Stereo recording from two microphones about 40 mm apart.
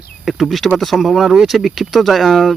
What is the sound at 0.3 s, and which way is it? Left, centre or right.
Speech, centre.